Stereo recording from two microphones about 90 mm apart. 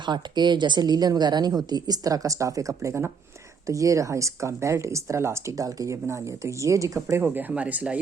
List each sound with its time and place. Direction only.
0.0 s a woman's voice: 60° right (ahead or behind); by 7.9 s 15° right (ahead or behind)